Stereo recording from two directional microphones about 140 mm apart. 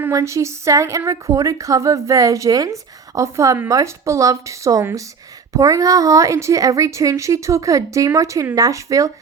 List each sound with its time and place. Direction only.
0.0 s a woman's voice: 20° right (ahead or behind)